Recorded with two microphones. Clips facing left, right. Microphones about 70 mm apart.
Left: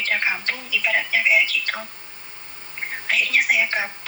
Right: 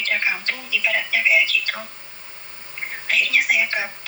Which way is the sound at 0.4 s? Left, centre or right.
Centre.